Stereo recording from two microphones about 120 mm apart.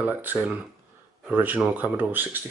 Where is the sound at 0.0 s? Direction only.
15° right (ahead or behind).